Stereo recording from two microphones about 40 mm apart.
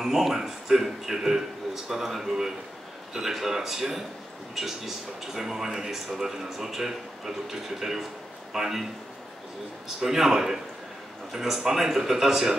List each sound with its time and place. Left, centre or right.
0.0 s speech: centre
10.0 s speech: centre